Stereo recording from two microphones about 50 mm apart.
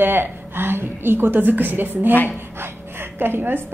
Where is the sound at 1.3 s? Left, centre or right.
Right.